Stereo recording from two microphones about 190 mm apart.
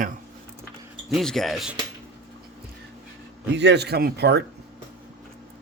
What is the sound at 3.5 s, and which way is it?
Speech, 65° right (ahead or behind).